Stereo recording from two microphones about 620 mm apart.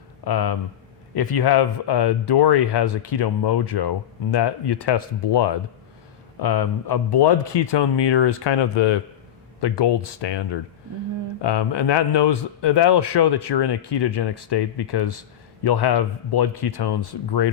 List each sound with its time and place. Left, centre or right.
0.3 s speech: left